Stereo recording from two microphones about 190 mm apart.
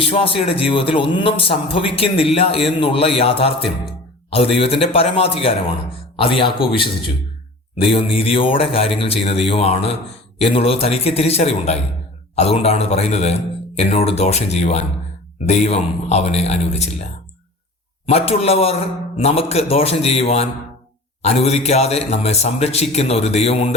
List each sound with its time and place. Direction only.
0.0 s a man's voice: 30° left (ahead or behind)
7.9 s a man's voice: 30° left (ahead or behind)